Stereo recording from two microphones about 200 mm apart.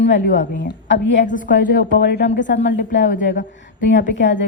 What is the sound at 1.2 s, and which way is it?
Speech, 40° left (ahead or behind).